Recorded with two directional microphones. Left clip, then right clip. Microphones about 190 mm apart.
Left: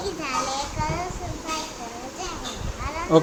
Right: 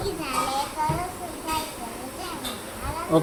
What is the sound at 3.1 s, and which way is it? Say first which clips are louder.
Speech: left 4 dB; 20° left (ahead or behind).